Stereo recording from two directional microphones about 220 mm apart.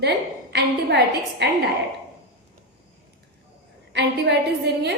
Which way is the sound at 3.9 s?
50° right (ahead or behind).